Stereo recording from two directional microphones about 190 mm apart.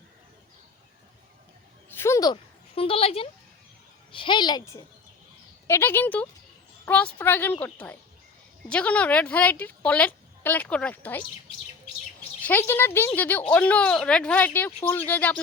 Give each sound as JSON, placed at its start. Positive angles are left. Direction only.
{"t": 1.9, "sound": "a sound", "side_deg": 15}
{"t": 4.1, "sound": "a woman's voice", "side_deg": 25}
{"t": 12.4, "sound": "a woman's voice", "side_deg": 10}